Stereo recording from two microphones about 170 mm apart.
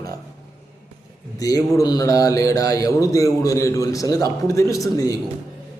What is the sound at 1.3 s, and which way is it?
Speech, 20° left (ahead or behind).